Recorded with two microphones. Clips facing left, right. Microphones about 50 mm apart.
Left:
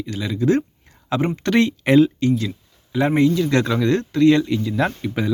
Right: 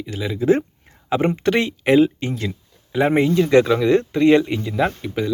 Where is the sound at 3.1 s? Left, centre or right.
Right.